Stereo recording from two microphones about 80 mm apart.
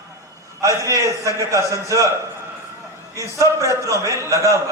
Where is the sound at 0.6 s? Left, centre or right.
Right.